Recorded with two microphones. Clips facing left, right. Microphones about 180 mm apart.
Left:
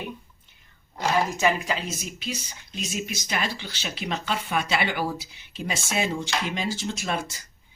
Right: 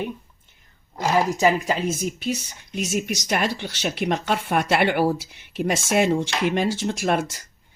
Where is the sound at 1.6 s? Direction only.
50° right (ahead or behind).